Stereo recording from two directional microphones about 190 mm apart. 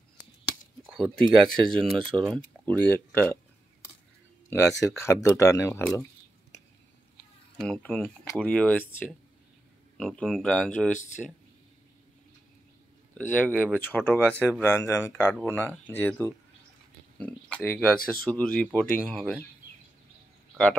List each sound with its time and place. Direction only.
0.8 s speech: centre (ahead or behind)
2.0 s speech: 25° right (ahead or behind)
2.3 s speech: 10° left (ahead or behind)
4.5 s speech: 15° left (ahead or behind)
7.5 s speech: 5° left (ahead or behind)
11.0 s speech: 40° left (ahead or behind)
13.3 s speech: 5° left (ahead or behind)